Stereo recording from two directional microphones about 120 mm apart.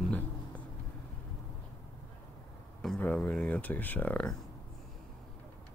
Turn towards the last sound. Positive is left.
turn(degrees=10)  # may be behind; listen again after turning